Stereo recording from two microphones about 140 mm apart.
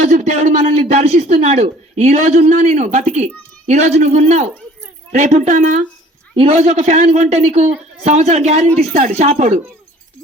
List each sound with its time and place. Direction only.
0.0 s speech: 50° right (ahead or behind)
6.3 s speech: 45° right (ahead or behind)